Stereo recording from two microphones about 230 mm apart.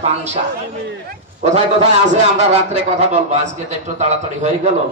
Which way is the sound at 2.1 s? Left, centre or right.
Right.